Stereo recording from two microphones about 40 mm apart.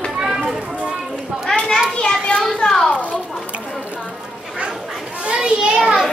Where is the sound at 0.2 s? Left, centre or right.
Centre.